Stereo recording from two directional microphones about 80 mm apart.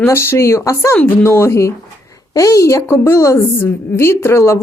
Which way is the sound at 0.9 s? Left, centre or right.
Left.